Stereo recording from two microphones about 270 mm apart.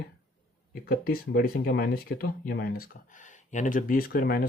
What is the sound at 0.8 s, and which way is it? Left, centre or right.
Speech, left.